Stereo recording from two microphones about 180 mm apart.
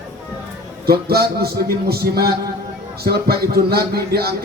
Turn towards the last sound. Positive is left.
turn(degrees=-60)  # may be behind; listen again after turning